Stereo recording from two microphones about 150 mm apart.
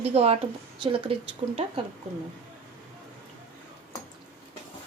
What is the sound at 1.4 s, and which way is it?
Speech, 45° right (ahead or behind).